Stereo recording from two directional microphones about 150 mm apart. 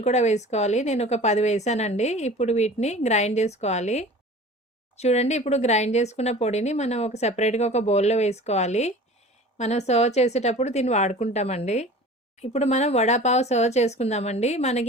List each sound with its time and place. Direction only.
0.0 s a woman's voice: 50° left (ahead or behind)